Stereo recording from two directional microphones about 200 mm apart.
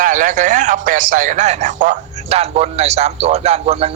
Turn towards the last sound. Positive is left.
turn(degrees=-30)  # may be behind; listen again after turning